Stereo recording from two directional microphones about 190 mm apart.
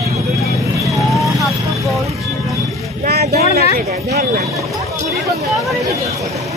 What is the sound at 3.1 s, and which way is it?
Vehicle, 55° right (ahead or behind).